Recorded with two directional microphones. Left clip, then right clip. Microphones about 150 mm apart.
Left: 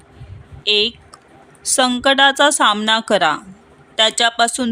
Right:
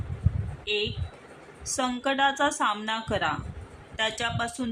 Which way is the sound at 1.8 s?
90° left.